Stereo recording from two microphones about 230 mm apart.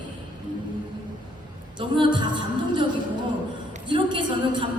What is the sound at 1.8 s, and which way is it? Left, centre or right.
Music, right.